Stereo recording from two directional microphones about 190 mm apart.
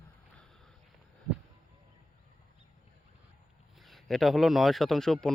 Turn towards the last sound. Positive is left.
turn(degrees=0)  # may be behind; listen again after turning